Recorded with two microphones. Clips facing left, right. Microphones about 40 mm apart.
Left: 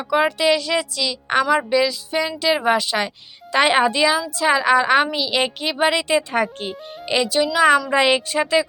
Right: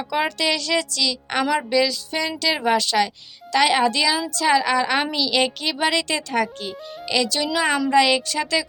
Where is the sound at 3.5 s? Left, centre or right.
Left.